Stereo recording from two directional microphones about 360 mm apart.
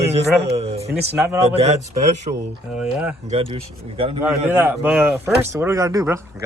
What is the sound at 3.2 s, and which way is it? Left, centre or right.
Speech, centre.